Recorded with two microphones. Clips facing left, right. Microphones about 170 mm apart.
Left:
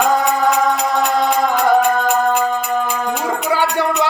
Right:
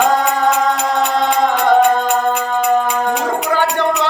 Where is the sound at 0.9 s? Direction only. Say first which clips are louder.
Right 1 dB; centre (ahead or behind).